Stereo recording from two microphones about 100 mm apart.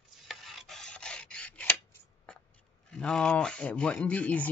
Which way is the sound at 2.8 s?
10° left (ahead or behind).